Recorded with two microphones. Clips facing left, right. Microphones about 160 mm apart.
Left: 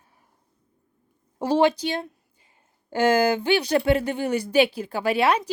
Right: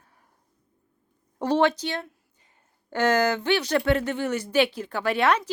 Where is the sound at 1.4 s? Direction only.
10° left (ahead or behind).